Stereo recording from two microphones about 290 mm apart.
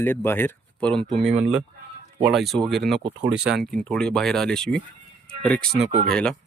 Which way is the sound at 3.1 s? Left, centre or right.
Right.